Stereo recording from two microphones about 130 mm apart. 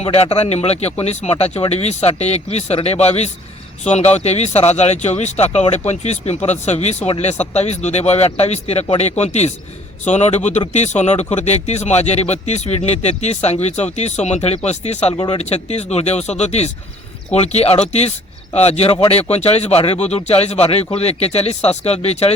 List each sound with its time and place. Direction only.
0.0 s speech: 50° left (ahead or behind)
15.1 s speech: 40° left (ahead or behind)
15.4 s speech: 55° left (ahead or behind)